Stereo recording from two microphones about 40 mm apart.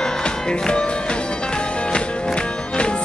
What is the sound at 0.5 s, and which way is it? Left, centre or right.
Music, left.